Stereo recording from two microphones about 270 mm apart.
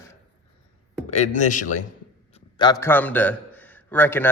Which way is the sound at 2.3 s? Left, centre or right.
Centre.